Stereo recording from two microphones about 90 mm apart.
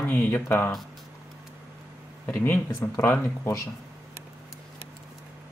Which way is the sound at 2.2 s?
25° left (ahead or behind).